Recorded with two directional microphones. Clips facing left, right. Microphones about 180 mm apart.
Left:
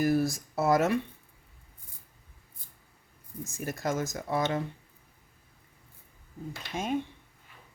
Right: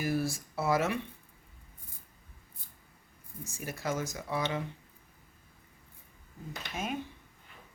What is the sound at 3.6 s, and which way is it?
Speech, 45° left (ahead or behind).